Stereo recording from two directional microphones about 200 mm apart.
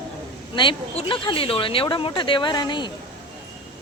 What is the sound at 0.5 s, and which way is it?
Speech, 25° left (ahead or behind).